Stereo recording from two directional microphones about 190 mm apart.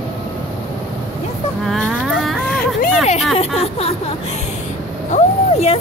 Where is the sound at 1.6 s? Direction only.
Centre (ahead or behind).